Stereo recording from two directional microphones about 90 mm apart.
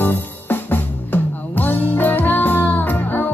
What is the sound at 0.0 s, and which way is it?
Music, 20° left (ahead or behind).